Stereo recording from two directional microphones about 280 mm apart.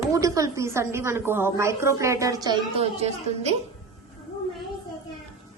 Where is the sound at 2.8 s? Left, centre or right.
Right.